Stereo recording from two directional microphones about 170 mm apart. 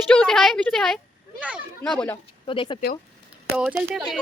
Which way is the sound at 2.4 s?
30° left (ahead or behind).